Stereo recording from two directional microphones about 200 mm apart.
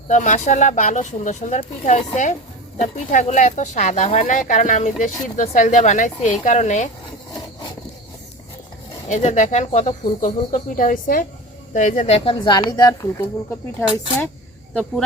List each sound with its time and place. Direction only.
0.1 s speech: 35° left (ahead or behind)
3.1 s speech: 35° left (ahead or behind)
9.0 s speech: 40° left (ahead or behind); by 13.2 s 15° left (ahead or behind)
14.7 s speech: 5° left (ahead or behind)